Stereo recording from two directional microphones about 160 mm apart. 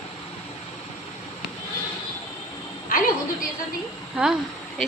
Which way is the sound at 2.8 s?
60° left (ahead or behind).